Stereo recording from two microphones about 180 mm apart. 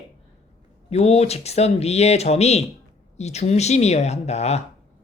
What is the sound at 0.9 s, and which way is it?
Speech, 35° left (ahead or behind).